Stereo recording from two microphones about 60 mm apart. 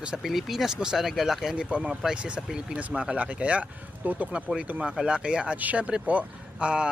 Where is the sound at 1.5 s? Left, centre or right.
Centre.